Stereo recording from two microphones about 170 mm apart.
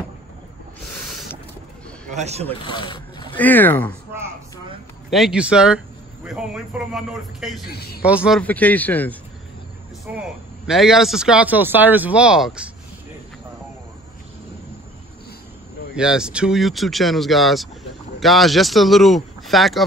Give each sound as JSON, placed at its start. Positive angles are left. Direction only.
{"t": 2.0, "sound": "speech", "side_deg": -40}
{"t": 2.6, "sound": "speech", "side_deg": 30}
{"t": 3.3, "sound": "a man's voice", "side_deg": 10}
{"t": 5.1, "sound": "speech", "side_deg": -5}
{"t": 7.6, "sound": "speech", "side_deg": 65}
{"t": 8.0, "sound": "speech", "side_deg": -5}
{"t": 8.4, "sound": "a man's voice", "side_deg": 10}
{"t": 10.1, "sound": "speech", "side_deg": -5}
{"t": 15.9, "sound": "speech", "side_deg": -5}